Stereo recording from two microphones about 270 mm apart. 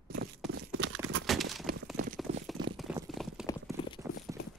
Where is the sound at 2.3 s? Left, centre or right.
Right.